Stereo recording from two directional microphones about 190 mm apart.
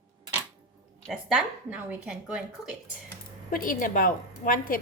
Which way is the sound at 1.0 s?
Centre (ahead or behind).